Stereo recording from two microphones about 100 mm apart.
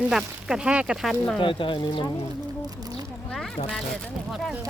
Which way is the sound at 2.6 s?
40° right (ahead or behind).